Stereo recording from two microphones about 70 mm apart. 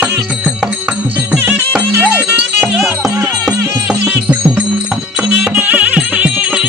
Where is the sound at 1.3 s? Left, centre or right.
Right.